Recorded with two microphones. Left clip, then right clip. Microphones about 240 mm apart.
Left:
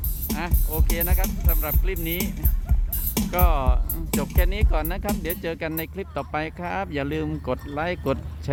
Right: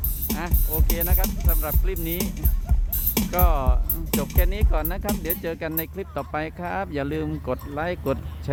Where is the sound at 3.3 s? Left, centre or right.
Centre.